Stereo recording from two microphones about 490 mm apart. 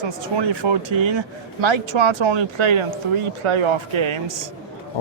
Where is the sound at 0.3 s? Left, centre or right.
Right.